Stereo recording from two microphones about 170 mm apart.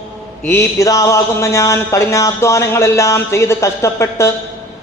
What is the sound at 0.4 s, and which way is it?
A man's voice, 15° left (ahead or behind).